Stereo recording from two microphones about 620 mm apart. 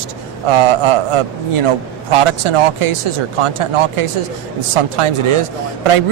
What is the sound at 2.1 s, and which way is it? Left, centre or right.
A man's voice, right.